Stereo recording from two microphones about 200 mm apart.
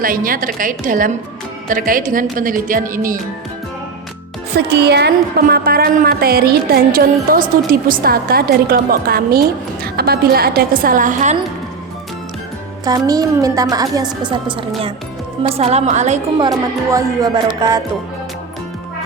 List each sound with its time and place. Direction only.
0.0 s a woman's voice: 45° right (ahead or behind)
4.5 s a woman's voice: 55° right (ahead or behind); by 11.3 s 40° right (ahead or behind)
12.8 s a woman's voice: 20° right (ahead or behind); by 16.2 s 35° right (ahead or behind)
16.4 s speech: 15° right (ahead or behind)